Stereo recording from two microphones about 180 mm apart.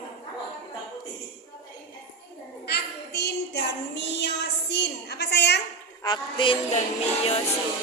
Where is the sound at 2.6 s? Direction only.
65° left (ahead or behind).